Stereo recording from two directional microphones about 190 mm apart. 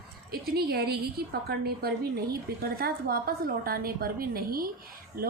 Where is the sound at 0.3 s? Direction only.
55° right (ahead or behind).